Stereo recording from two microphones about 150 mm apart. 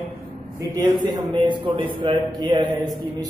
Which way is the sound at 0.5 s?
25° right (ahead or behind).